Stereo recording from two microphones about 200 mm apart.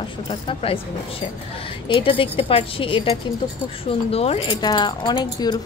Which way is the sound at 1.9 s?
25° left (ahead or behind).